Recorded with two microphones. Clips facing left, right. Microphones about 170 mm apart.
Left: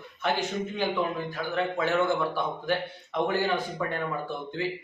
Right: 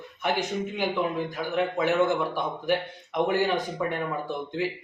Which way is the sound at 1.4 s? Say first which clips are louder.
Right 2 dB; 15° right (ahead or behind).